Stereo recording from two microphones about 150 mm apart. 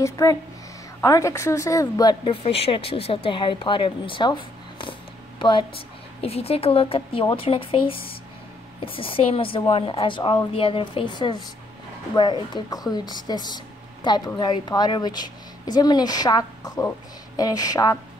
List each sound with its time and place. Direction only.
0.0 s a woman's voice: 25° left (ahead or behind)
2.2 s a woman's voice: 40° left (ahead or behind); by 17.9 s 25° left (ahead or behind)